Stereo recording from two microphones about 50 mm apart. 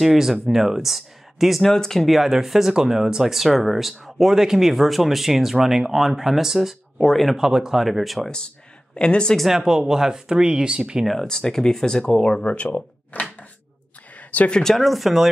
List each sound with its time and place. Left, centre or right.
0.0 s speech: centre
1.7 s speech: centre
2.0 s speech: centre
8.9 s speech: centre
9.4 s speech: centre
11.1 s speech: centre; by 13.5 s left
14.1 s a sound: left
14.6 s speech: centre